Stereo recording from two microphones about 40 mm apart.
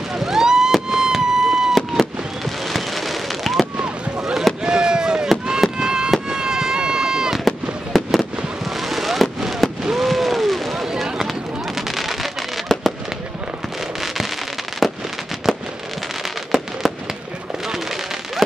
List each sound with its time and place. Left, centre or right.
0.1 s fireworks: centre
0.8 s a sound: centre
2.7 s fireworks: centre
4.6 s fireworks: centre
7.4 s fireworks: centre
9.9 s a sound: centre
10.9 s fireworks: centre
14.8 s fireworks: centre
16.5 s fireworks: centre